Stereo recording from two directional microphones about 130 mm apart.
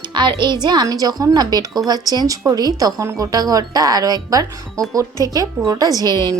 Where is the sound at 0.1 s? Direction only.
35° right (ahead or behind).